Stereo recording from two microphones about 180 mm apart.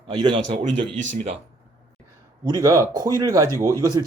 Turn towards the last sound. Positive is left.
turn(degrees=-20)  # may be behind; listen again after turning